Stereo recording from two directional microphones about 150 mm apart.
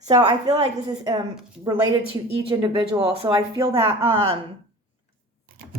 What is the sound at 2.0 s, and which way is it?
Speech, 40° right (ahead or behind).